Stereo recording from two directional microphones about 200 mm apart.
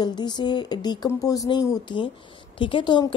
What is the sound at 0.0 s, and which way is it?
A woman's voice, 20° left (ahead or behind).